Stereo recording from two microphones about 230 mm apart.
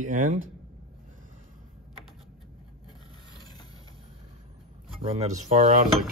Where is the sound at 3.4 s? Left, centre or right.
Centre.